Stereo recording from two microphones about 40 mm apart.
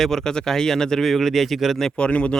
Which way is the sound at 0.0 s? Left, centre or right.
Centre.